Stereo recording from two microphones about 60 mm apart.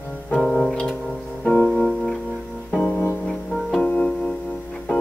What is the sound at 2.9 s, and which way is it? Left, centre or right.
Music, left.